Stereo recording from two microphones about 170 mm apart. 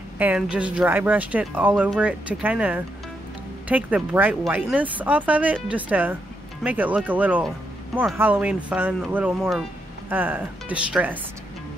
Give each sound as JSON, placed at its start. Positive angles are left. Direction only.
{"t": 0.2, "sound": "speech", "side_deg": -10}
{"t": 9.4, "sound": "speech", "side_deg": 0}
{"t": 10.0, "sound": "speech", "side_deg": -10}